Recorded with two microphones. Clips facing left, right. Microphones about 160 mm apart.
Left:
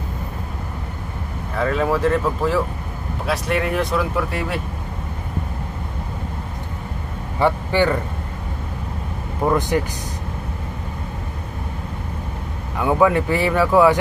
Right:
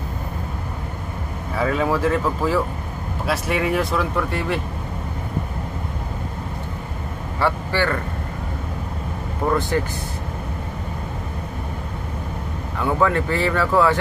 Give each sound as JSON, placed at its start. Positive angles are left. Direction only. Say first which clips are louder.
{"t": 1.6, "sound": "speech", "louder": "left 1 dB", "side_deg": 0}
{"t": 7.3, "sound": "a man's voice", "louder": "left 4 dB", "side_deg": 15}
{"t": 9.5, "sound": "speech", "louder": "left 2 dB", "side_deg": 15}
{"t": 12.7, "sound": "speech", "louder": "left 3 dB", "side_deg": 15}